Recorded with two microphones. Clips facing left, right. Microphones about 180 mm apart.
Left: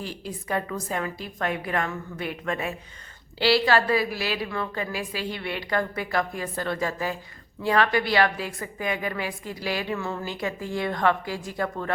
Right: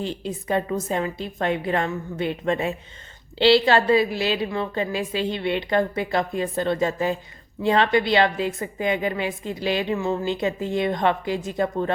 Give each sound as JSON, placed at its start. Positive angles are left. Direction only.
{"t": 0.0, "sound": "a woman's voice", "side_deg": -25}